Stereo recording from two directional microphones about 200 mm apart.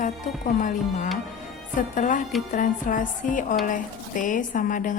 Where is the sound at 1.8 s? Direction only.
40° left (ahead or behind).